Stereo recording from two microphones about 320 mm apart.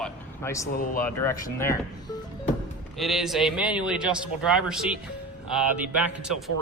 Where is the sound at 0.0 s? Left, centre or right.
Centre.